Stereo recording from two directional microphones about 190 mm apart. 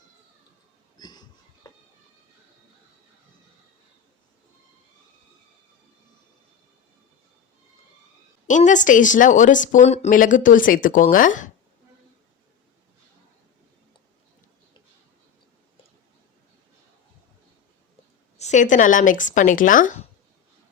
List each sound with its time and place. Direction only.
0.9 s a sound: 20° left (ahead or behind)
8.4 s a woman's voice: 40° left (ahead or behind)
18.3 s a woman's voice: 40° left (ahead or behind)